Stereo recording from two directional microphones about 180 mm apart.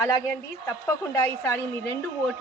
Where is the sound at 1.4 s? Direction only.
15° left (ahead or behind).